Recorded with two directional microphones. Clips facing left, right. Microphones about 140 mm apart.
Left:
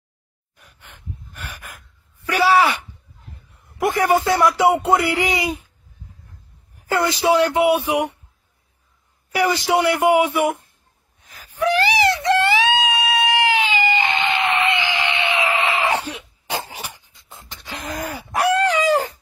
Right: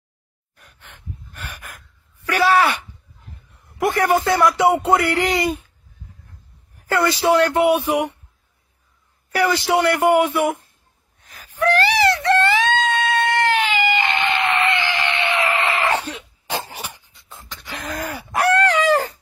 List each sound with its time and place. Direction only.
0.6 s gasp: 10° left (ahead or behind)
2.2 s a sound: 10° left (ahead or behind)
3.9 s a man's voice: 10° left (ahead or behind)
6.7 s a man's voice: 15° left (ahead or behind)
9.3 s a man's voice: 15° left (ahead or behind)
11.2 s wail: 10° left (ahead or behind)
13.9 s a sound: 20° left (ahead or behind)
17.1 s beatboxing: 15° left (ahead or behind)
17.7 s a sound: 15° left (ahead or behind)
18.4 s chicken: 10° left (ahead or behind)